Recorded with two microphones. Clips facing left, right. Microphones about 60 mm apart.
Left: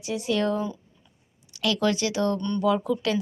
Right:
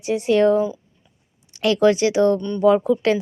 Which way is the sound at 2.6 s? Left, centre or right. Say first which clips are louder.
Right 9 dB; right.